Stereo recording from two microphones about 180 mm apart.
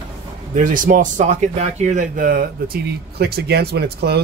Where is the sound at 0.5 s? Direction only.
45° right (ahead or behind); by 4.2 s 65° right (ahead or behind).